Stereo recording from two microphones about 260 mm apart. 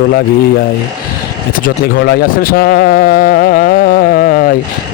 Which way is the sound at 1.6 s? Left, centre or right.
Left.